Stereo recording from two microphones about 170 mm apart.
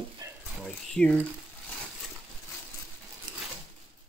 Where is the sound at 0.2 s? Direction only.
20° right (ahead or behind).